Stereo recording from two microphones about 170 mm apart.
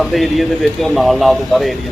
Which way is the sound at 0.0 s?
Centre (ahead or behind).